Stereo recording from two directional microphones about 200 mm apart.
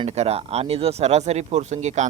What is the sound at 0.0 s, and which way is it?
Speech, 35° right (ahead or behind).